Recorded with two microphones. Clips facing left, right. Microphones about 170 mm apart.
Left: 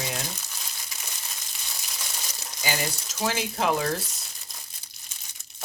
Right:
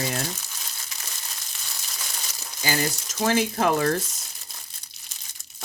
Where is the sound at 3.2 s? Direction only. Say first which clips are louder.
Right 4 dB; 50° right (ahead or behind).